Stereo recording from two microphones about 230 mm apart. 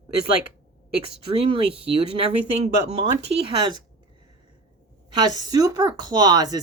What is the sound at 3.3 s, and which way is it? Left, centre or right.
Speech, right.